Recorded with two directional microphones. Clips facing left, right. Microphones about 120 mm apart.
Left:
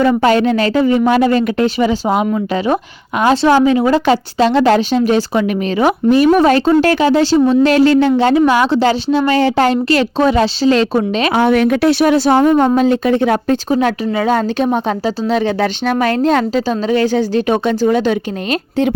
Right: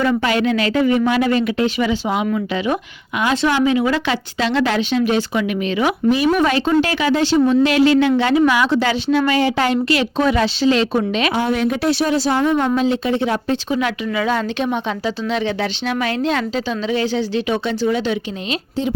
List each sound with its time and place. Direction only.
0.0 s a woman's voice: 35° left (ahead or behind)
11.3 s speech: 70° left (ahead or behind)
12.4 s speech: 40° left (ahead or behind)